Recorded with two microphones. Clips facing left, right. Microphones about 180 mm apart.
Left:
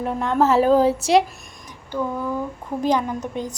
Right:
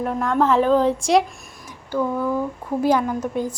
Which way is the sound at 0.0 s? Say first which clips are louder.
Even; centre (ahead or behind).